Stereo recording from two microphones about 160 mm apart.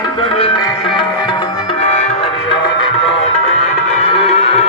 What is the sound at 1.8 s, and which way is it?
Music, 45° left (ahead or behind).